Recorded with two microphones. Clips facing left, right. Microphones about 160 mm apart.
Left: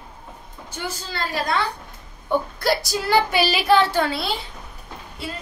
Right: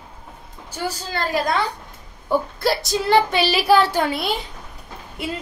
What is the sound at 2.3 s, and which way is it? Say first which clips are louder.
A woman's voice: right 1 dB; centre (ahead or behind).